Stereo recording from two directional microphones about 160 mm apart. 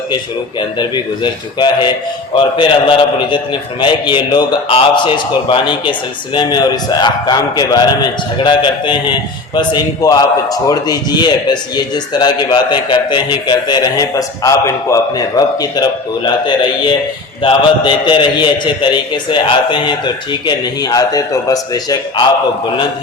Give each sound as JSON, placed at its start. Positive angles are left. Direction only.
{"t": 0.8, "sound": "a man's voice", "side_deg": 25}
{"t": 17.4, "sound": "a man's voice", "side_deg": 30}